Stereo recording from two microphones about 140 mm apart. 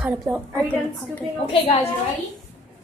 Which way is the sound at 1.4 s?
40° left (ahead or behind).